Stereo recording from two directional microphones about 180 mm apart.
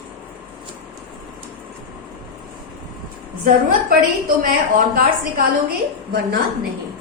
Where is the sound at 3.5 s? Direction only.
55° right (ahead or behind).